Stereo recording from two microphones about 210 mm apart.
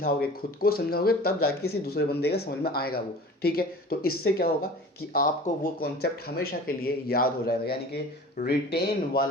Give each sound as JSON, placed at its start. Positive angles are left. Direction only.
{"t": 0.0, "sound": "speech", "side_deg": 45}
{"t": 5.8, "sound": "speech", "side_deg": 45}